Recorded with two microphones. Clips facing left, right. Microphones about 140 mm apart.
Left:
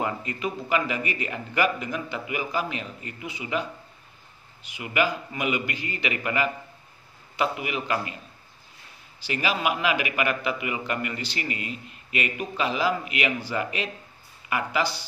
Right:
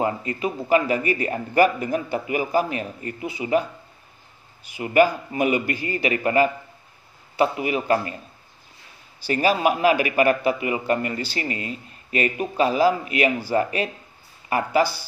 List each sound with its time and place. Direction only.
0.0 s a man's voice: 30° right (ahead or behind)
4.7 s a man's voice: 40° right (ahead or behind)
9.3 s a man's voice: 40° right (ahead or behind)